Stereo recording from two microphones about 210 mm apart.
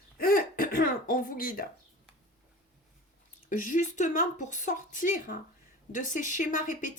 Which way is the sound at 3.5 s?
40° left (ahead or behind).